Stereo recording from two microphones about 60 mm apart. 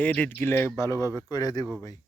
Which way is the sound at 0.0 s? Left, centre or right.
Left.